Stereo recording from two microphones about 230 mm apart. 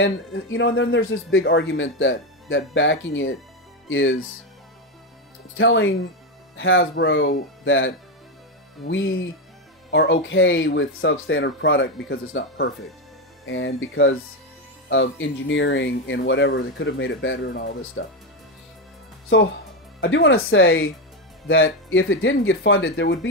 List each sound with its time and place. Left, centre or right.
0.0 s speech: left
5.6 s speech: left
19.2 s speech: left